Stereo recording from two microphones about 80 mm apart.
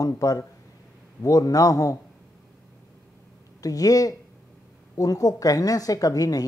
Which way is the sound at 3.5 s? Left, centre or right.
Left.